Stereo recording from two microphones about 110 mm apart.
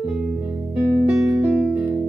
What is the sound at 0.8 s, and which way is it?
Music, 15° right (ahead or behind).